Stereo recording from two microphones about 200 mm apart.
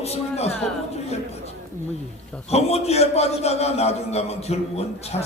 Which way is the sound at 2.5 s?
30° left (ahead or behind).